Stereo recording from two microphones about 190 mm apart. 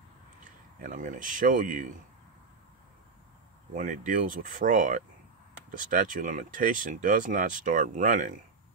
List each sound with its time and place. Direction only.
0.7 s speech: 45° right (ahead or behind)
3.7 s speech: 45° right (ahead or behind)